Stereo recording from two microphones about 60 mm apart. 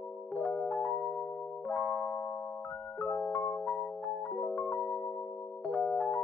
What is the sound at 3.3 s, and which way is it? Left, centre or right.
Music, left.